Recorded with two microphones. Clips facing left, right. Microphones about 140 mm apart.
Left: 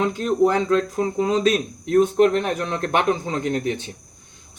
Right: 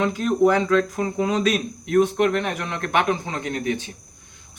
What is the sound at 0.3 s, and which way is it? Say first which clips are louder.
Speech: even; 30° left (ahead or behind).